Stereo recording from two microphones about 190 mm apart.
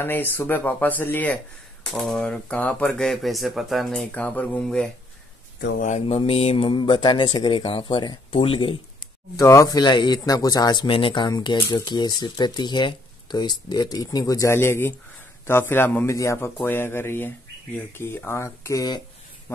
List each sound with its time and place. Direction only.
0.0 s speech: 10° left (ahead or behind)
5.8 s speech: 40° left (ahead or behind)
9.4 s speech: 15° left (ahead or behind)